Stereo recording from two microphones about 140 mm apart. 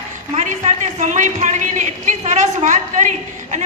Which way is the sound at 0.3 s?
60° right (ahead or behind).